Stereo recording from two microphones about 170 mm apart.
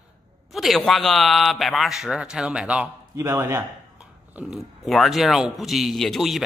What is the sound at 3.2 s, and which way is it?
Mantra, 15° right (ahead or behind).